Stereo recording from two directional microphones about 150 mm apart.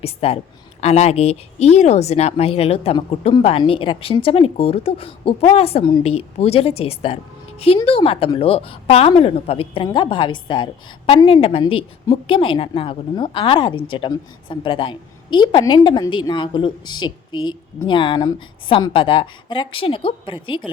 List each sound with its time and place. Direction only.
0.0 s a woman's voice: 40° left (ahead or behind)